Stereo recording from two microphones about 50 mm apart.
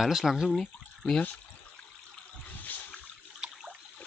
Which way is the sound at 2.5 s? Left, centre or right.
Left.